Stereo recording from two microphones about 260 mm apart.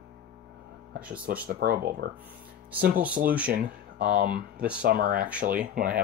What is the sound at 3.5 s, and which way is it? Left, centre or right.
Speech, right.